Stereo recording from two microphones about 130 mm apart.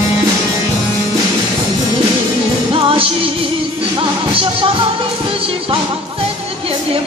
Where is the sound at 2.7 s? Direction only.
45° right (ahead or behind).